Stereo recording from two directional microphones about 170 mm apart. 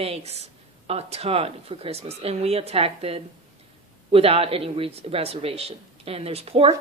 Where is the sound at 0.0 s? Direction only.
35° right (ahead or behind).